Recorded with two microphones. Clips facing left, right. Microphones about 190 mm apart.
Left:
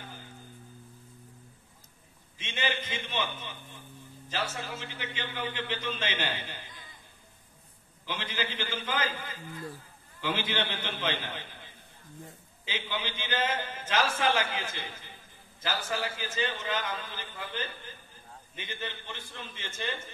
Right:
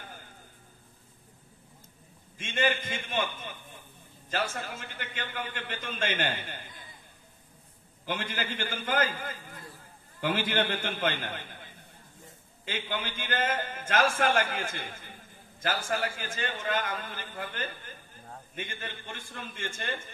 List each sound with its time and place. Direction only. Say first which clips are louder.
2.3 s a man's voice: right 5 dB; 50° right (ahead or behind)
8.0 s a man's voice: right 1 dB; 50° right (ahead or behind)
12.6 s a man's voice: right 1 dB; 55° right (ahead or behind)